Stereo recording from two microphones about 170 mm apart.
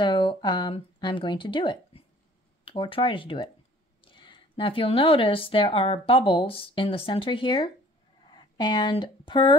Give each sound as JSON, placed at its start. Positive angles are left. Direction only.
{"t": 0.0, "sound": "a woman's voice", "side_deg": 25}